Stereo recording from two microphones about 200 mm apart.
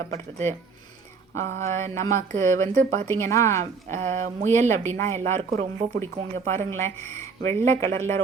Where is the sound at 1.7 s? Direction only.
15° left (ahead or behind).